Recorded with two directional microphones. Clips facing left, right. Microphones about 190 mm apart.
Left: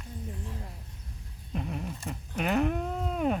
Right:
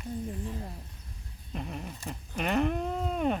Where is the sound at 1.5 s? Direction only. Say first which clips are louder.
Left 3 dB; centre (ahead or behind).